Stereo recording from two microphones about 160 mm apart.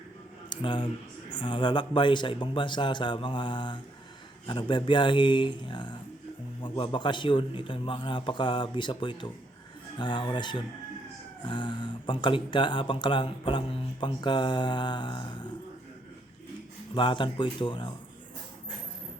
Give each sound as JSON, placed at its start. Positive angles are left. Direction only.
{"t": 0.5, "sound": "a man's voice", "side_deg": 30}
{"t": 16.9, "sound": "a man's voice", "side_deg": 30}